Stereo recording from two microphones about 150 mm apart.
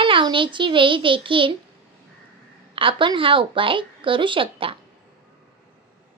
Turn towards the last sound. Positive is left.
turn(degrees=-35)  # may be behind; listen again after turning